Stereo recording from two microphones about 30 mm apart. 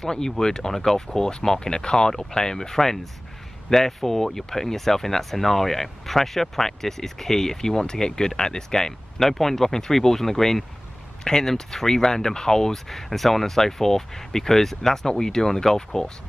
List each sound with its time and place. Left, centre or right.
0.0 s speech: left